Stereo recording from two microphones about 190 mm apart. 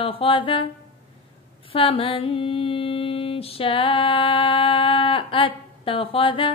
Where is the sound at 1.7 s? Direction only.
30° left (ahead or behind).